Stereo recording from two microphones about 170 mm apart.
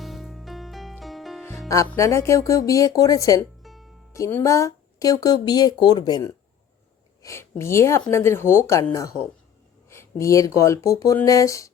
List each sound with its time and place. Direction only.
0.0 s music: centre (ahead or behind)
1.5 s music: 20° left (ahead or behind)
1.9 s speech: 15° left (ahead or behind)
3.6 s music: centre (ahead or behind)
4.1 s speech: 15° left (ahead or behind)